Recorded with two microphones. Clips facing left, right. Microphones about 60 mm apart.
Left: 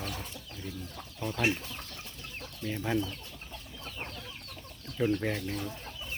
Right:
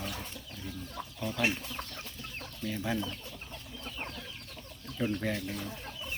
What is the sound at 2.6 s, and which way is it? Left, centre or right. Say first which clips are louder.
Speech: left 1 dB; centre.